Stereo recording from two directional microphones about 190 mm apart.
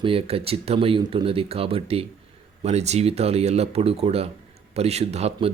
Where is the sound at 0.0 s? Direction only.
30° right (ahead or behind).